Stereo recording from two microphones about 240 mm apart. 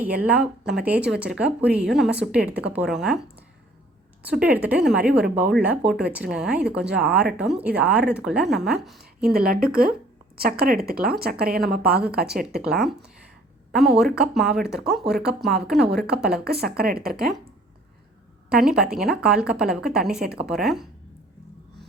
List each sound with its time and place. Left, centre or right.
0.0 s a woman's voice: centre
9.3 s speech: right
12.5 s a woman's voice: centre
16.4 s speech: right
17.2 s a woman's voice: centre
18.4 s a woman's voice: centre